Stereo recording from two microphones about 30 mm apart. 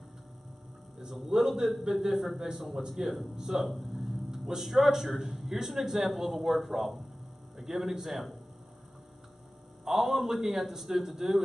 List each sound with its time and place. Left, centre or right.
1.1 s a man's voice: centre
3.3 s speech: centre
3.6 s a sound: centre
4.6 s a man's voice: centre
9.8 s speech: centre